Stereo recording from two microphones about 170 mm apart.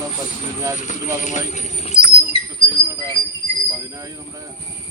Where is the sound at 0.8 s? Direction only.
45° left (ahead or behind).